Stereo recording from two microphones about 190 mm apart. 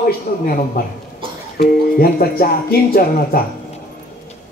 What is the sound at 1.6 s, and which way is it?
Speech, 50° left (ahead or behind).